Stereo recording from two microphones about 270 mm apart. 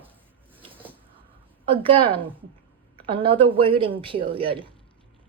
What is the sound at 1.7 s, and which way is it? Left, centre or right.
Speech, centre.